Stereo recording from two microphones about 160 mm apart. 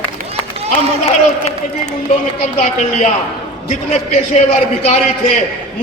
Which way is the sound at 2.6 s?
45° left (ahead or behind).